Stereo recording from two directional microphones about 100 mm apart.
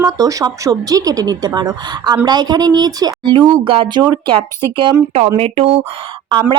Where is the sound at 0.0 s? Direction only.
35° right (ahead or behind).